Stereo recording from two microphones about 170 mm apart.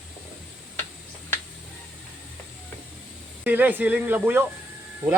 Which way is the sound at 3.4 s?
10° right (ahead or behind).